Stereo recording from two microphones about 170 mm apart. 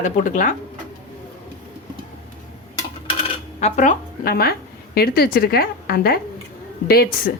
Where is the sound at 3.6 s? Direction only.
45° left (ahead or behind); by 6.2 s 65° left (ahead or behind).